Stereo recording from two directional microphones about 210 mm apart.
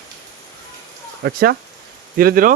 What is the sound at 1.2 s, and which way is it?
Speech, 50° right (ahead or behind).